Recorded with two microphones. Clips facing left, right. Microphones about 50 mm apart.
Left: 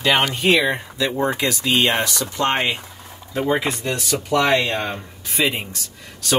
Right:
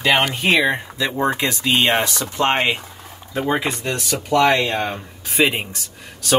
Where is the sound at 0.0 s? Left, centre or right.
Centre.